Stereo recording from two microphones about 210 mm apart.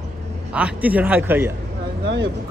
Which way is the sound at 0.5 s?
5° right (ahead or behind).